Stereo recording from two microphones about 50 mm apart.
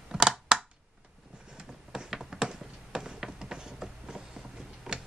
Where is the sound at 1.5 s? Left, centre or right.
Centre.